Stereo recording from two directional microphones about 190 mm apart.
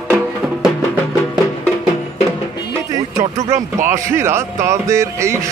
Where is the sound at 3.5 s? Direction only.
15° right (ahead or behind).